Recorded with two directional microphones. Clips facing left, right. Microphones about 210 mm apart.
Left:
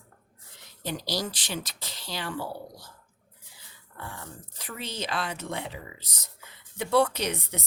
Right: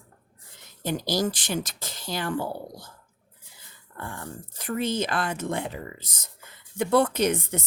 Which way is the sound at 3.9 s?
50° right (ahead or behind).